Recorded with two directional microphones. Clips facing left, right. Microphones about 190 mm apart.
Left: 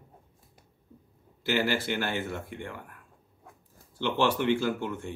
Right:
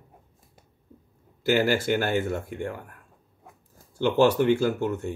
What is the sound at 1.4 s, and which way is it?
Speech, 45° right (ahead or behind).